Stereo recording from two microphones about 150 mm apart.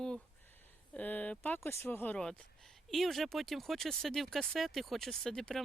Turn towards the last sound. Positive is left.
turn(degrees=5)  # may be behind; listen again after turning